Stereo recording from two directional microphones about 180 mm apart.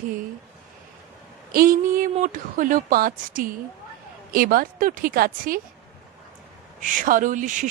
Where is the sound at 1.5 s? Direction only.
50° right (ahead or behind).